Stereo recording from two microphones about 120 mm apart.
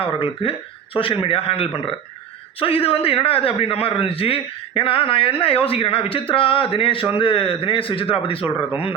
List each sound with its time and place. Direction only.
0.0 s a man's voice: 50° left (ahead or behind)